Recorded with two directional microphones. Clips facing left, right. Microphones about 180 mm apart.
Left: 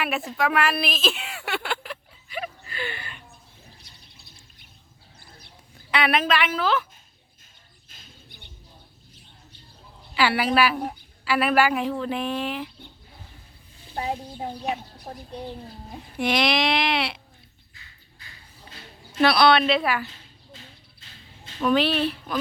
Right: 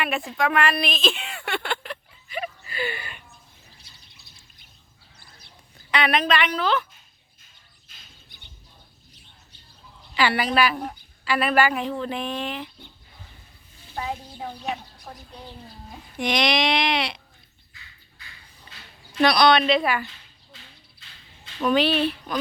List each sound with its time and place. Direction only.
0.0 s speech: 5° left (ahead or behind)
0.3 s a sound: 5° left (ahead or behind); by 3.2 s 10° right (ahead or behind)
5.9 s speech: 5° left (ahead or behind)
10.2 s a woman's voice: 5° left (ahead or behind)
13.9 s speech: 30° left (ahead or behind)
16.1 s speech: 5° left (ahead or behind)
18.7 s a sound: 5° left (ahead or behind)
19.2 s speech: 5° left (ahead or behind)
21.6 s speech: centre (ahead or behind)